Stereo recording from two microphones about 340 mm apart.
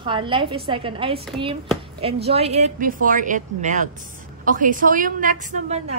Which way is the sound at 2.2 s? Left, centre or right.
Centre.